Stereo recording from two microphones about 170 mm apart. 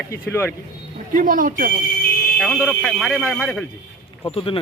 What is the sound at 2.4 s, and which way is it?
Speech, centre (ahead or behind).